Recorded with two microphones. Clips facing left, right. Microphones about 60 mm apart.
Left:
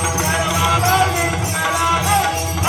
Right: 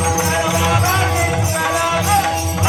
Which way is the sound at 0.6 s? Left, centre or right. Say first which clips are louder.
Even; right.